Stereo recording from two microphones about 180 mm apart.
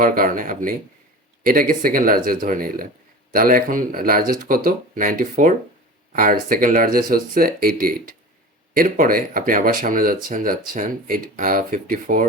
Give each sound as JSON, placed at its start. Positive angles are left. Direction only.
{"t": 0.0, "sound": "speech", "side_deg": -50}